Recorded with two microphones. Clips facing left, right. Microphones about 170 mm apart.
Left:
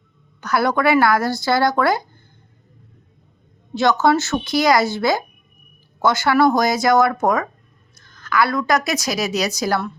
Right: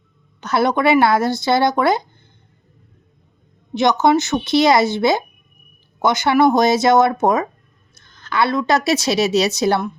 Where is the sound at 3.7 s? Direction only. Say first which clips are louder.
Right 2 dB; 20° right (ahead or behind).